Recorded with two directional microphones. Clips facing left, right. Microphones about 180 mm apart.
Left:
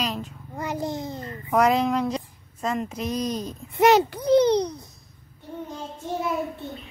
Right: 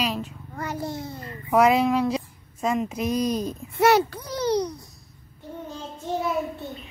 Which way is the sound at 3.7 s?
20° left (ahead or behind).